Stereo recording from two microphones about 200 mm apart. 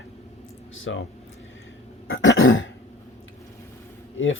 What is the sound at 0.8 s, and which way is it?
Speech, 70° left (ahead or behind).